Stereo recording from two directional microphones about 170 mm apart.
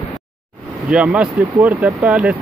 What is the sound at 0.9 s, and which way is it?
Speech, 5° right (ahead or behind).